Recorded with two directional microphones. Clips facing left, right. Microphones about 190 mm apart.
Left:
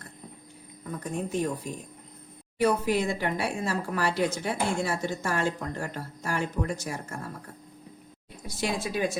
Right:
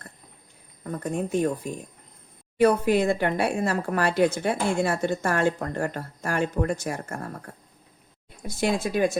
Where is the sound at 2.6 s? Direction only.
55° right (ahead or behind).